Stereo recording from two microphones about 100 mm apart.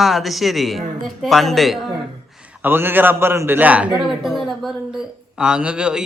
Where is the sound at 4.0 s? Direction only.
Centre (ahead or behind).